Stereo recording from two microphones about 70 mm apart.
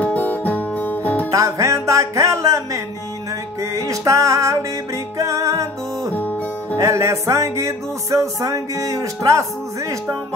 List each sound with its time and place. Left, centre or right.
0.0 s music: left
1.3 s music: right
6.1 s music: left
6.8 s music: right